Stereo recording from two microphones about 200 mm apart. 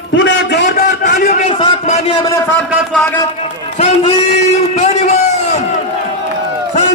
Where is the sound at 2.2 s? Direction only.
15° left (ahead or behind).